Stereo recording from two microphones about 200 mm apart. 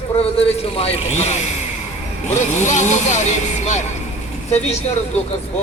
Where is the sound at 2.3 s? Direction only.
35° left (ahead or behind).